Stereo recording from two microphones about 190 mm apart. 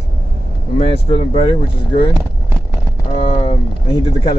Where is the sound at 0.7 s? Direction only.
30° left (ahead or behind).